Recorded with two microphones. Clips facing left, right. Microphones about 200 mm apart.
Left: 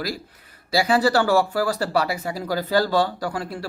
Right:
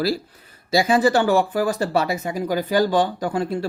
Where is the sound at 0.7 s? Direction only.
20° right (ahead or behind).